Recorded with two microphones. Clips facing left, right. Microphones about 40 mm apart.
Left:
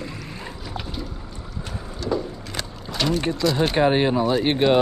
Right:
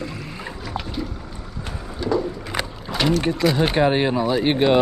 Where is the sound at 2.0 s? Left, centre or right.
Centre.